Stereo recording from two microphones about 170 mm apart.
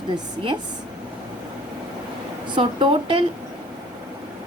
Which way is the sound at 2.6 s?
30° right (ahead or behind).